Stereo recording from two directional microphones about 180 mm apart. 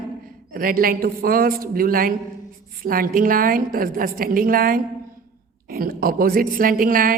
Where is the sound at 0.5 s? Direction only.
55° right (ahead or behind).